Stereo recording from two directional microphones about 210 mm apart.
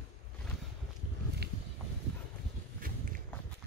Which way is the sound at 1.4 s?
50° right (ahead or behind).